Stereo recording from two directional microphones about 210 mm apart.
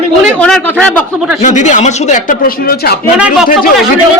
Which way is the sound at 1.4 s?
35° left (ahead or behind).